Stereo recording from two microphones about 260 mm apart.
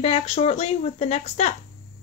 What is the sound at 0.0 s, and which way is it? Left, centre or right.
A woman's voice, left.